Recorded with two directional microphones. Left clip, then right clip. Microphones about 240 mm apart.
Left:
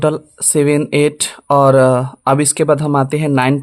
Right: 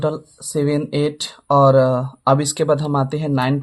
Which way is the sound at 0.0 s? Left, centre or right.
Left.